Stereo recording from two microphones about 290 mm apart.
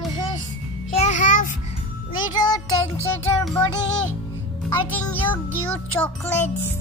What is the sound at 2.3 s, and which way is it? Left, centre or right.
Music, centre.